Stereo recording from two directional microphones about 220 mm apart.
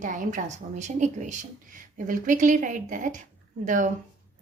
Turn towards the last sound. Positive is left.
turn(degrees=-35)  # may be behind; listen again after turning